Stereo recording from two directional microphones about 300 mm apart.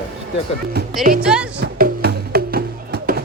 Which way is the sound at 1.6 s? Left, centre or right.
Right.